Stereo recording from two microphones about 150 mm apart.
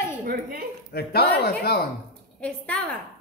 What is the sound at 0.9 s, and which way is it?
Speech, 90° left.